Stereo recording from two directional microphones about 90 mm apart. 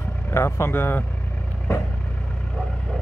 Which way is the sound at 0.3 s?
30° left (ahead or behind).